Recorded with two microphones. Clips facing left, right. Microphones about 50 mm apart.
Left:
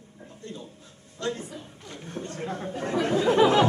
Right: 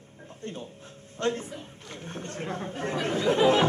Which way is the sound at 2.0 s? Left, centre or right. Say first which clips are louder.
Left 1 dB; right.